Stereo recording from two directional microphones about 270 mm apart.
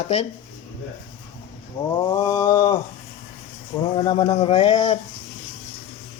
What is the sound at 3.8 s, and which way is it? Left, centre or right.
Speech, centre.